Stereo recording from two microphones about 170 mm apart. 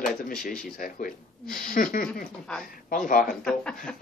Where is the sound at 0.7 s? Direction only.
55° left (ahead or behind).